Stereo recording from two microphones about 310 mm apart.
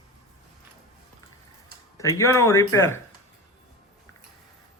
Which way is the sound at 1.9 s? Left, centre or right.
Centre.